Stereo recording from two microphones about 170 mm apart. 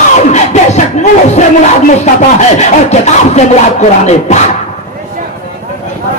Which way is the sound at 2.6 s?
40° left (ahead or behind).